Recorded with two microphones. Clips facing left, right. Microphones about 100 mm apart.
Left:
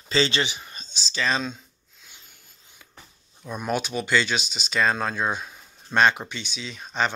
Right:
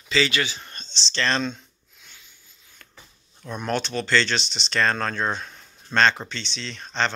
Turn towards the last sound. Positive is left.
turn(degrees=10)  # may be behind; listen again after turning